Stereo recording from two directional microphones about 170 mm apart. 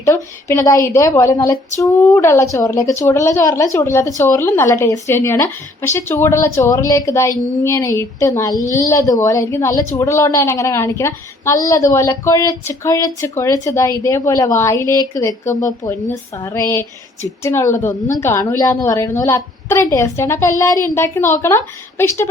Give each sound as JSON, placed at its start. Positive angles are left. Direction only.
{"t": 0.0, "sound": "a woman's voice", "side_deg": 15}
{"t": 16.6, "sound": "a woman's voice", "side_deg": 15}